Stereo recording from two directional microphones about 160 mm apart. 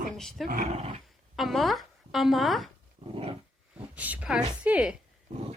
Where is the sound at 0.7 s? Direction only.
40° right (ahead or behind).